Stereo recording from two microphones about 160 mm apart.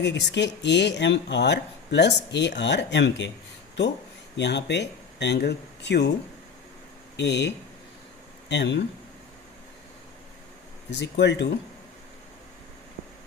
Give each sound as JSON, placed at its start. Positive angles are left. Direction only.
{"t": 0.0, "sound": "speech", "side_deg": 90}
{"t": 4.4, "sound": "speech", "side_deg": 90}
{"t": 7.2, "sound": "speech", "side_deg": 90}
{"t": 11.0, "sound": "speech", "side_deg": 90}